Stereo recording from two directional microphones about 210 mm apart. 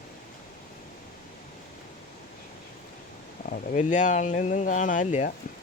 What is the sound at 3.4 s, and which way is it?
Speech, 35° left (ahead or behind).